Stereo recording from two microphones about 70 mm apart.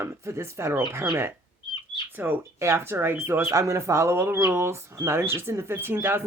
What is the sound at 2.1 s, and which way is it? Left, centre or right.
Speech, right.